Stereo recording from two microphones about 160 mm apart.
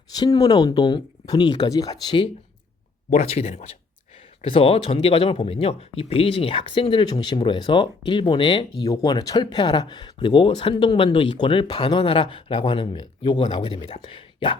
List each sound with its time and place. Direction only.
0.1 s speech: 25° left (ahead or behind)
3.1 s speech: 40° left (ahead or behind)